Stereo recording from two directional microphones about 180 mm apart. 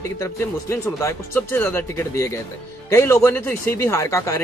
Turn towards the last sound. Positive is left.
turn(degrees=15)  # may be behind; listen again after turning